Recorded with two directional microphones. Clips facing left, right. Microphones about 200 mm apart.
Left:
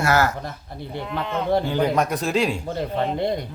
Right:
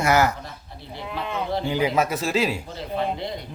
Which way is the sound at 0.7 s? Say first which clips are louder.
Left 7 dB; 50° left (ahead or behind).